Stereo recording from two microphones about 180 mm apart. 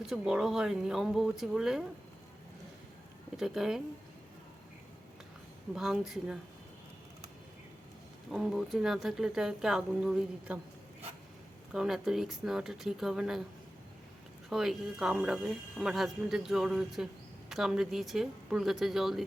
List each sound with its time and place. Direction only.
0.0 s a woman's voice: 5° right (ahead or behind)
3.3 s a woman's voice: centre (ahead or behind)
5.7 s a woman's voice: 5° right (ahead or behind)
8.3 s a woman's voice: centre (ahead or behind)
11.7 s a woman's voice: centre (ahead or behind)
14.5 s a woman's voice: centre (ahead or behind)